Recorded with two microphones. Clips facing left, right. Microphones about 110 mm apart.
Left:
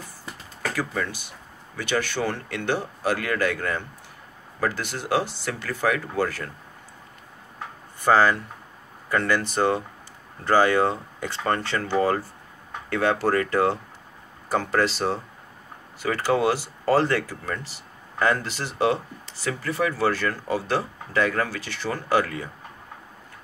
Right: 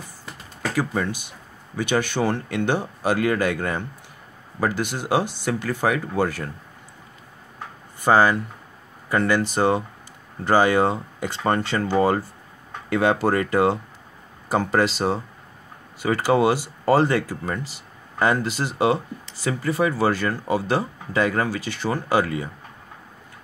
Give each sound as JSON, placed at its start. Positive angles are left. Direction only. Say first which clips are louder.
{"t": 0.6, "sound": "speech", "louder": "right 3 dB", "side_deg": -20}
{"t": 8.0, "sound": "speech", "louder": "right 2 dB", "side_deg": -15}